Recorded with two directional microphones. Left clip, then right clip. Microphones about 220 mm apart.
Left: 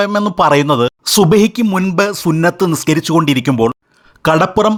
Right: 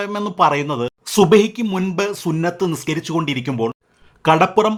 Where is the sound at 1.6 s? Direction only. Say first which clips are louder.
Left 7 dB; 15° left (ahead or behind).